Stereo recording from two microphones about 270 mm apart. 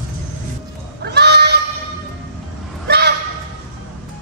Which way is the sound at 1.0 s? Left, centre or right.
Right.